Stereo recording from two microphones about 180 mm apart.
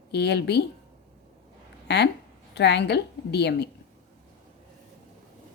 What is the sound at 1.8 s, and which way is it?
A woman's voice, 70° left (ahead or behind).